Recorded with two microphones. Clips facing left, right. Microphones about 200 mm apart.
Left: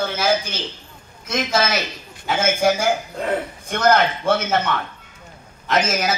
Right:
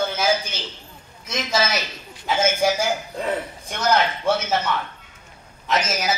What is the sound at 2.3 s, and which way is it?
A man's voice, 55° left (ahead or behind).